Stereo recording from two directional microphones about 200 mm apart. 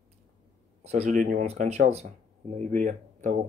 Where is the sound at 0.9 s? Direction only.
35° right (ahead or behind).